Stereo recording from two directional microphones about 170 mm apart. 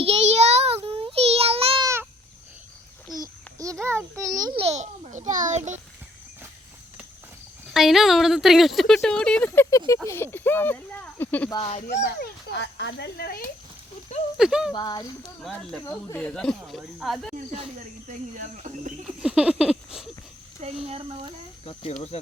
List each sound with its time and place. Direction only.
0.0 s child singing: 40° right (ahead or behind)
1.8 s a sound: 15° right (ahead or behind)
3.2 s a sound: 20° right (ahead or behind)
4.4 s a child's voice: 35° right (ahead or behind)
7.7 s speech: centre (ahead or behind)
12.0 s a child's voice: 70° left (ahead or behind)
14.3 s speech: 5° right (ahead or behind)
14.7 s speech: 25° left (ahead or behind)
15.4 s speech: 5° left (ahead or behind)
15.8 s speech: 15° left (ahead or behind)
18.1 s speech: 45° right (ahead or behind)
19.0 s a sound: 5° right (ahead or behind)
20.6 s speech: 40° right (ahead or behind)
21.6 s speech: 35° left (ahead or behind)